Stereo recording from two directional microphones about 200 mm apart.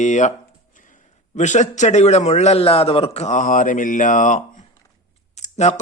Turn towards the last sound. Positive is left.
turn(degrees=35)  # may be behind; listen again after turning